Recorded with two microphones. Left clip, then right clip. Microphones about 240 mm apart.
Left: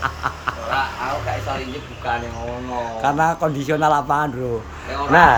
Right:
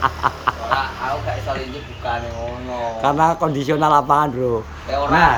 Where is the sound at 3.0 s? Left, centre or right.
Centre.